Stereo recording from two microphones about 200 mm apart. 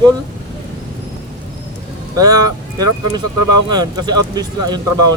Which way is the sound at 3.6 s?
20° right (ahead or behind).